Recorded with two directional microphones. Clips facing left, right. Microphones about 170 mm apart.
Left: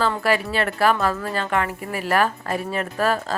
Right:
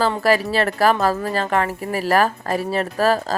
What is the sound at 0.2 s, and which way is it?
Speech, 40° right (ahead or behind).